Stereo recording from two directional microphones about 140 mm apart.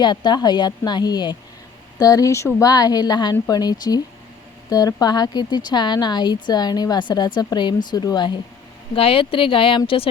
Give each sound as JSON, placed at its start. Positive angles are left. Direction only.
{"t": 0.0, "sound": "a woman's voice", "side_deg": 35}
{"t": 9.0, "sound": "a woman's voice", "side_deg": 40}